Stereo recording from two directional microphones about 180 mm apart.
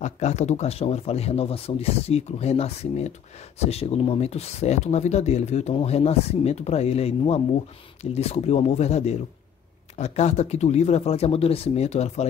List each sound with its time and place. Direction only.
0.0 s speech: 40° left (ahead or behind)